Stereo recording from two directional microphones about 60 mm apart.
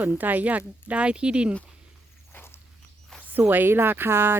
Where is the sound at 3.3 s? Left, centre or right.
Right.